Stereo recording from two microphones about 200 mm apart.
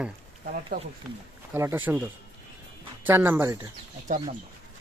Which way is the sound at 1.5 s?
10° right (ahead or behind).